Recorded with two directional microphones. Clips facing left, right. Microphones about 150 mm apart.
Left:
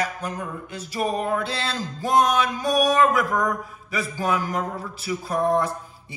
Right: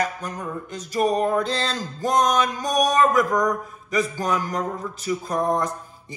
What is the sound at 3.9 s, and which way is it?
Speech, 5° left (ahead or behind).